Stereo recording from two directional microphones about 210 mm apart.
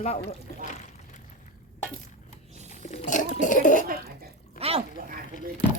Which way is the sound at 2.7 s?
30° left (ahead or behind).